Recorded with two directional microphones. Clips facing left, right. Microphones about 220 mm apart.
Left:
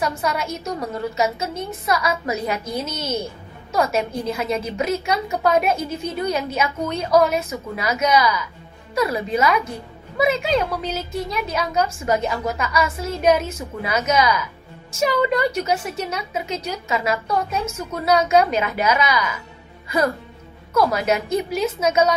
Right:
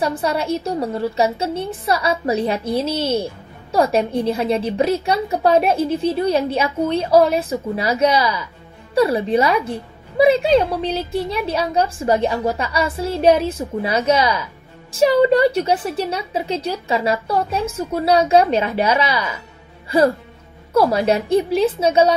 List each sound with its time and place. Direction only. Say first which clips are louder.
0.0 s a woman's voice: right 3 dB; 30° right (ahead or behind)